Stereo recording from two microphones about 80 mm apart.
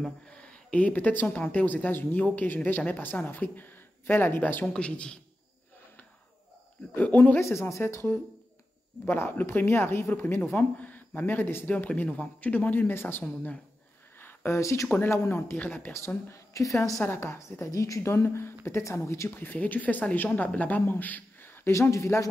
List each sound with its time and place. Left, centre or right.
0.3 s speech: centre
4.6 s speech: centre
6.9 s speech: left
7.4 s a woman's voice: left; by 13.6 s centre
14.2 s a woman's voice: left
15.5 s speech: centre
16.3 s a woman's voice: left
17.0 s a woman's voice: left